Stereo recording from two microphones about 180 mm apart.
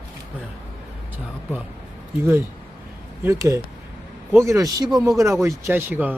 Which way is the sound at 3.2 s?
15° right (ahead or behind).